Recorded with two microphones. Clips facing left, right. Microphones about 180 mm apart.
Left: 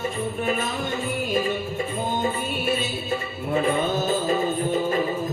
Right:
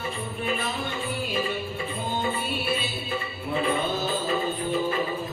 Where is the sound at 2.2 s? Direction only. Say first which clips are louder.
Left 3 dB; 45° left (ahead or behind).